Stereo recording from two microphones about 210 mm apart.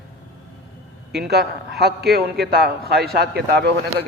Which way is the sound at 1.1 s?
50° right (ahead or behind).